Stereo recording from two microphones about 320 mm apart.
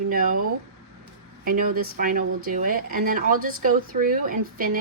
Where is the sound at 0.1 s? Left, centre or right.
Right.